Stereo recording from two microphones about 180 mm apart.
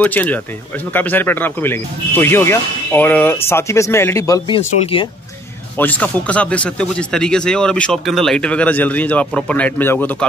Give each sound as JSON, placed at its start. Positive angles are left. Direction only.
{"t": 0.0, "sound": "speech", "side_deg": 10}
{"t": 4.6, "sound": "speech", "side_deg": 30}
{"t": 5.8, "sound": "speech", "side_deg": 10}